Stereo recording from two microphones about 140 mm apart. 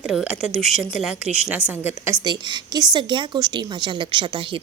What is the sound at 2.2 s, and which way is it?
A woman's voice, 30° right (ahead or behind).